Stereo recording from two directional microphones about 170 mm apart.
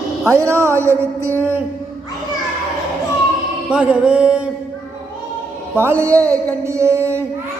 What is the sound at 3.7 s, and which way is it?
Music, 5° right (ahead or behind).